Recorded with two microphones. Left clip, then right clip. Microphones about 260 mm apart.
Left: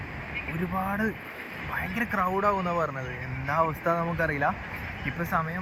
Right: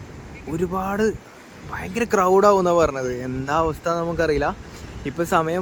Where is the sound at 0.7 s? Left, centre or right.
Right.